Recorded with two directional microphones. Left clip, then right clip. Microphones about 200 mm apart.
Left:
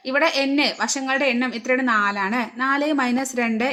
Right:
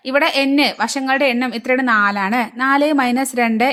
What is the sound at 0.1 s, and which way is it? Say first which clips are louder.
A woman's voice: right 4 dB; 30° right (ahead or behind).